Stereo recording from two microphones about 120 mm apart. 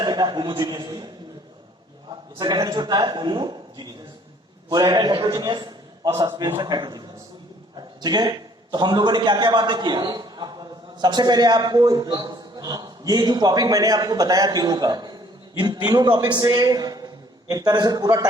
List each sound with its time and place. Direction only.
0.0 s a man's voice: 35° right (ahead or behind)
2.4 s a man's voice: 35° right (ahead or behind)